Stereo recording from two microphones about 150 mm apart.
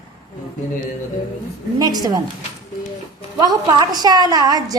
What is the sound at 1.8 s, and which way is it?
Speech, 25° right (ahead or behind).